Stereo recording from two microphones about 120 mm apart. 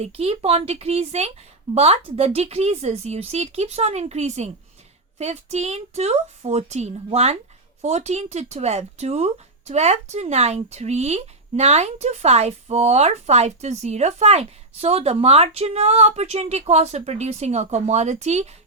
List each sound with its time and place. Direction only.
0.0 s speech: 55° right (ahead or behind)